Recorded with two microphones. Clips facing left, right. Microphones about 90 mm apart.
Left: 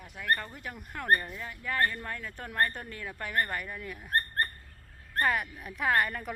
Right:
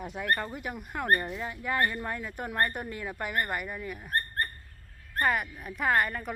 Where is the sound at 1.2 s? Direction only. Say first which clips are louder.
Right 4 dB; 20° right (ahead or behind); by 4.1 s 5° right (ahead or behind).